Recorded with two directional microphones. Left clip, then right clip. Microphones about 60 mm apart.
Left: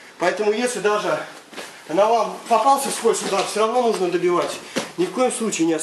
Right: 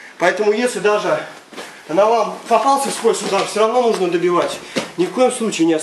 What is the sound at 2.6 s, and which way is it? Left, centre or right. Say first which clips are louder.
Speech: even; centre.